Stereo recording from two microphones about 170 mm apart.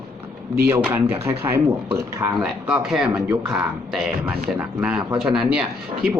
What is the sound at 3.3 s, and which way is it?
Speech, 15° right (ahead or behind).